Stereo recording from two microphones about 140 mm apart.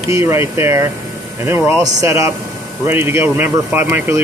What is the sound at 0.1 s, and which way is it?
Speech, 20° right (ahead or behind).